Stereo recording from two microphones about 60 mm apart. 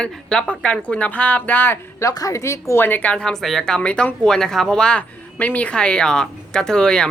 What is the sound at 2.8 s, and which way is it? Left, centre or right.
Speech, left.